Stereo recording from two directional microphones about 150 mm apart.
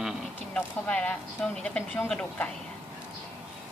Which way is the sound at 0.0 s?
Centre (ahead or behind).